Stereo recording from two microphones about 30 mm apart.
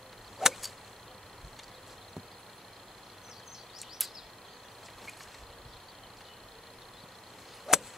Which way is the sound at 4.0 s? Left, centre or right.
Centre.